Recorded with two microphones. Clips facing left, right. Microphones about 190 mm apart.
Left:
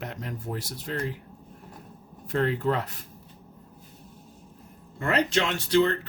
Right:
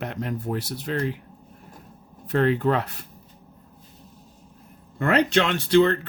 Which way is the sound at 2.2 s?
65° right (ahead or behind).